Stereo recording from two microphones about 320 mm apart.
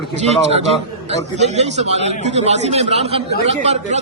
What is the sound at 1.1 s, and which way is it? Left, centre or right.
A man's voice, right.